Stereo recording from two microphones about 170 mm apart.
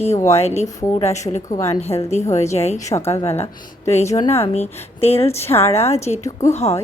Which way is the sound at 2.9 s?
15° left (ahead or behind).